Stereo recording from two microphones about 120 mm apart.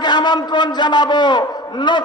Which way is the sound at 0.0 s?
35° left (ahead or behind).